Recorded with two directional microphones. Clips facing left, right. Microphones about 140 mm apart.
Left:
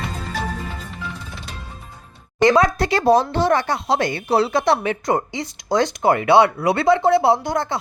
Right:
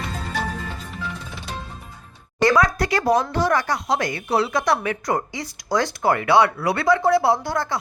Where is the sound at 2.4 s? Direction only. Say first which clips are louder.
Left 3 dB; 20° left (ahead or behind).